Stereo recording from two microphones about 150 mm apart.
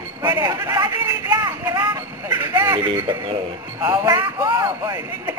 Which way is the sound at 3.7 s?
25° right (ahead or behind).